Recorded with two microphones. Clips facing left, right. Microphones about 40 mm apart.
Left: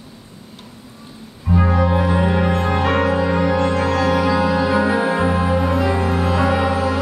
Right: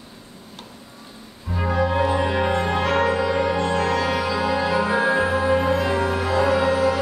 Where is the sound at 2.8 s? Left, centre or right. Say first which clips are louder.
Left 3 dB; centre.